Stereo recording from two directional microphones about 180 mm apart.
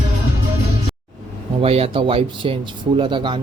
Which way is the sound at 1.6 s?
35° right (ahead or behind).